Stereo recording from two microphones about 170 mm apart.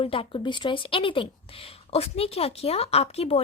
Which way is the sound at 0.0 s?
30° left (ahead or behind).